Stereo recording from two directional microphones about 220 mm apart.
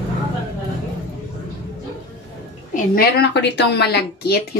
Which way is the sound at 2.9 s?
50° left (ahead or behind).